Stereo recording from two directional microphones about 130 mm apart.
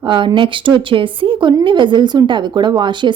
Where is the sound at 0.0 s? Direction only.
40° right (ahead or behind).